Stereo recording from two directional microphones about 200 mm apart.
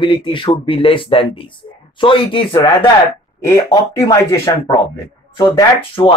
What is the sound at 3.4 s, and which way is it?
A man's voice, 15° left (ahead or behind).